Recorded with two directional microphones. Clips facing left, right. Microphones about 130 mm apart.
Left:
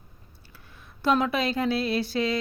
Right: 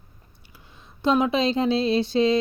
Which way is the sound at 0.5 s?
20° right (ahead or behind).